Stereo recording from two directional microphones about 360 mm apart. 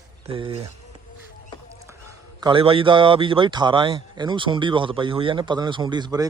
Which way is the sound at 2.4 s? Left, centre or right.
Centre.